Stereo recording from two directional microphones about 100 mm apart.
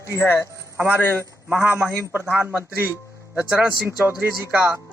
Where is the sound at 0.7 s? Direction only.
20° right (ahead or behind).